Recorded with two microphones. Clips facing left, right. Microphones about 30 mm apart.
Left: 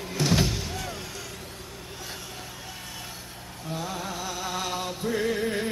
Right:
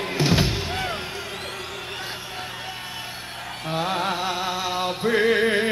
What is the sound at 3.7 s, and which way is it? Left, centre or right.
Music, right.